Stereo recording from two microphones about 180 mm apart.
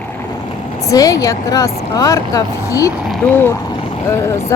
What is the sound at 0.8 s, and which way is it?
A woman's voice, 20° left (ahead or behind).